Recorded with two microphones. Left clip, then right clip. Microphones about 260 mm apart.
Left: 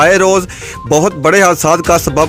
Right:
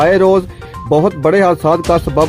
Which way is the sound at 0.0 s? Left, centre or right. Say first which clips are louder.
Left 1 dB; centre.